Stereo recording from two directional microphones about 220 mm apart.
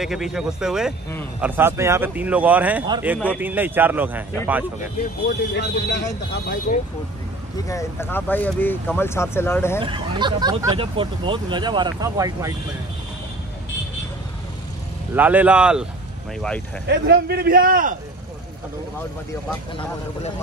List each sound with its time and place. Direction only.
0.0 s speech: centre (ahead or behind)
5.0 s speech: 50° left (ahead or behind)
7.5 s speech: 15° left (ahead or behind)
9.8 s speech: 20° right (ahead or behind)
15.1 s speech: 5° right (ahead or behind)
16.8 s a man's voice: 50° right (ahead or behind)